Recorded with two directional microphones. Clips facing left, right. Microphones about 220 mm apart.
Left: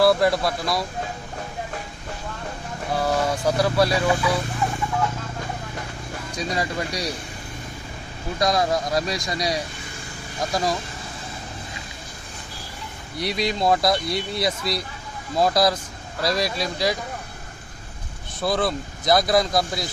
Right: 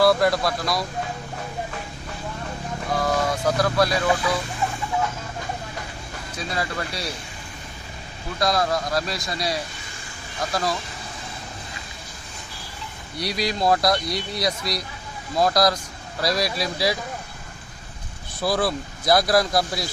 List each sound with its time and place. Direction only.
0.0 s speech: centre (ahead or behind)
2.9 s speech: 10° left (ahead or behind)
6.5 s speech: 15° left (ahead or behind)
8.4 s speech: 15° left (ahead or behind)
13.1 s speech: centre (ahead or behind)
18.4 s speech: 5° right (ahead or behind)